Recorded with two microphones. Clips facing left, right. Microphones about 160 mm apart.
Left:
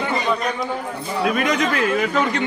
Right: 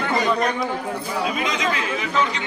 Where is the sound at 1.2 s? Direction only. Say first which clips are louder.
Left 6 dB; 55° left (ahead or behind).